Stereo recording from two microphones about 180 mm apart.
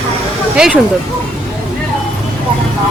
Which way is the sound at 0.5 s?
5° right (ahead or behind).